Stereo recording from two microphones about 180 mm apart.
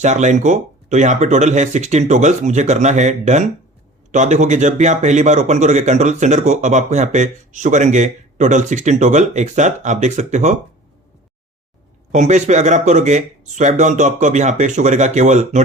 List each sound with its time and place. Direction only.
0.0 s speech: 40° right (ahead or behind)
12.1 s speech: 40° right (ahead or behind)